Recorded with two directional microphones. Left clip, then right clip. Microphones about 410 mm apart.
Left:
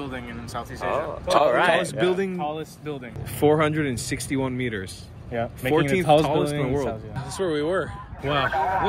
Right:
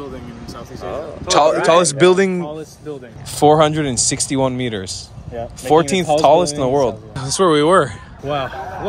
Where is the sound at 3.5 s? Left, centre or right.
Centre.